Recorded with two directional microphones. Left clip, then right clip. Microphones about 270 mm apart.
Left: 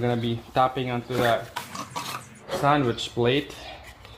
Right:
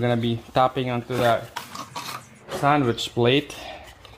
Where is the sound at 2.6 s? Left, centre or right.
Right.